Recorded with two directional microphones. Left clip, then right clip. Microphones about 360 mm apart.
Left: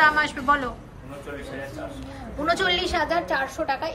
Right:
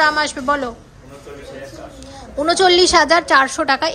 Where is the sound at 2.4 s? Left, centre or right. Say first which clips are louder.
Right 10 dB; centre.